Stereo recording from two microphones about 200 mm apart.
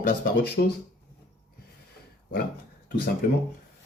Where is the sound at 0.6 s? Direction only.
60° left (ahead or behind).